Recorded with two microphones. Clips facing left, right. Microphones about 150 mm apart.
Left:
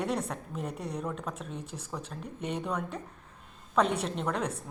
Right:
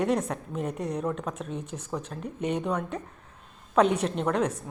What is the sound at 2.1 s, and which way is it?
A woman's voice, 5° right (ahead or behind).